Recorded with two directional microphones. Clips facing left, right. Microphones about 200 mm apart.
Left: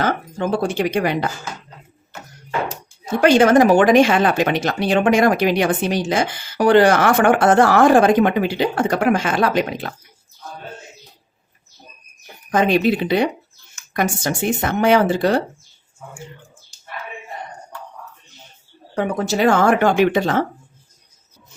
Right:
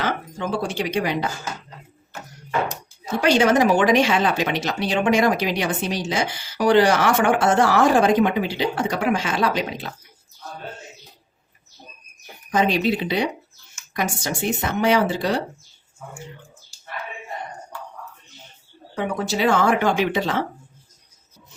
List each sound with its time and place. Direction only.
0.0 s speech: 50° left (ahead or behind)
3.2 s a woman's voice: 55° left (ahead or behind)
12.5 s a woman's voice: 55° left (ahead or behind)
18.9 s speech: 45° left (ahead or behind)